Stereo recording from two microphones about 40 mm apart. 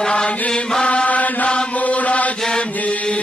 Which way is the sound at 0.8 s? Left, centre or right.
Left.